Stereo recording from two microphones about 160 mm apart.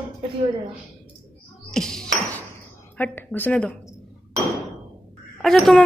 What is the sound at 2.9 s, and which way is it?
Speech, 10° left (ahead or behind).